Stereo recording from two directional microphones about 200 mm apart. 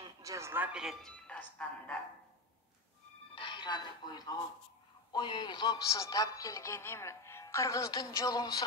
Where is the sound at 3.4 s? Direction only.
25° left (ahead or behind).